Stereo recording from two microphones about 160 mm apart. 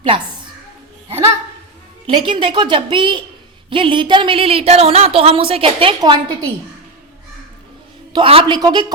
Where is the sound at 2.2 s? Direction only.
30° right (ahead or behind).